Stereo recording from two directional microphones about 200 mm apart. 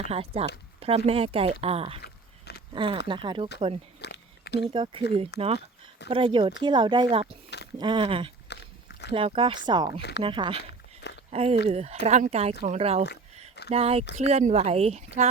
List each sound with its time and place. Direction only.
0.0 s speech: 30° right (ahead or behind)
4.0 s a sound: 55° left (ahead or behind)
4.7 s speech: 25° right (ahead or behind)
8.4 s biting: 60° left (ahead or behind)
9.1 s speech: 25° right (ahead or behind)
10.0 s speech: 60° left (ahead or behind)
10.2 s speech: 25° right (ahead or behind)